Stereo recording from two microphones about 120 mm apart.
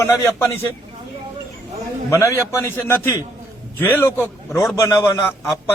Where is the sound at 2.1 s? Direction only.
25° left (ahead or behind).